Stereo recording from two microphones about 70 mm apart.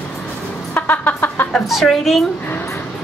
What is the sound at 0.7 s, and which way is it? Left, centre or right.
Music, left.